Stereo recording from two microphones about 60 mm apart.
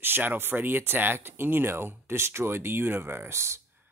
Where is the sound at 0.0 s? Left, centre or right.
Right.